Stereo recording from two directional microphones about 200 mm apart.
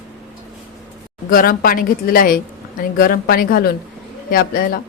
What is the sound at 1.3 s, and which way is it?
Speech, 45° left (ahead or behind).